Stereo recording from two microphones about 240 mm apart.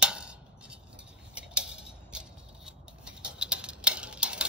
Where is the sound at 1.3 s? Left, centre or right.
Centre.